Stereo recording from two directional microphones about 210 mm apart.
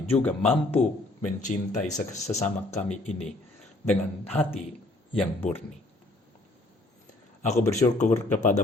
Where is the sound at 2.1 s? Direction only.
30° left (ahead or behind).